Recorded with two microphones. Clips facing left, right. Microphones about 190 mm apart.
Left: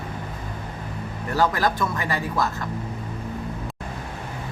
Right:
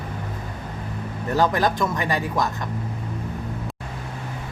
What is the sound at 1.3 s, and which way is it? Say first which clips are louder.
Speech: right 1 dB; 20° right (ahead or behind).